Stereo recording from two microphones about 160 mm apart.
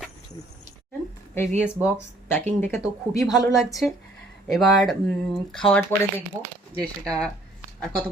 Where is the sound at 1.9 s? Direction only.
10° left (ahead or behind).